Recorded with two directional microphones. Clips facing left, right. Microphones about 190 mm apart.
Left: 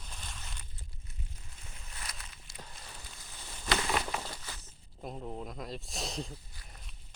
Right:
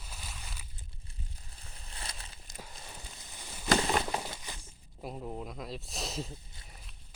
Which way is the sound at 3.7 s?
30° right (ahead or behind).